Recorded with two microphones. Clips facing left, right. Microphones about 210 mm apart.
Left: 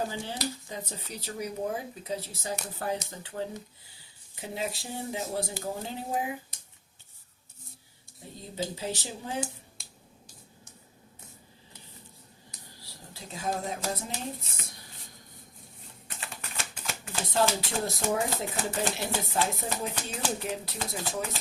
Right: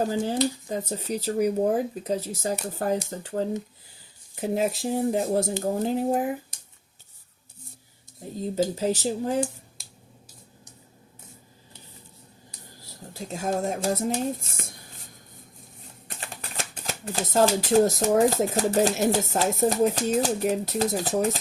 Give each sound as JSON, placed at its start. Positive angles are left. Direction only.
{"t": 0.0, "sound": "speech", "side_deg": -40}
{"t": 8.2, "sound": "speech", "side_deg": -45}
{"t": 9.8, "sound": "finger snapping", "side_deg": 0}
{"t": 12.8, "sound": "a sound", "side_deg": -45}
{"t": 16.0, "sound": "speech", "side_deg": -40}